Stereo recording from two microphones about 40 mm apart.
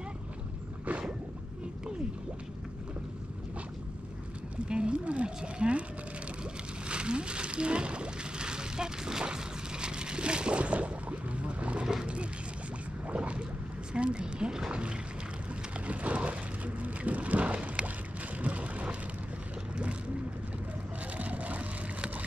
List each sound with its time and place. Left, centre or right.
4.6 s speech: right
6.9 s slosh: right
13.1 s boat: right
13.9 s speech: right
15.9 s a sound: right
18.4 s vehicle: right
21.2 s vehicle: right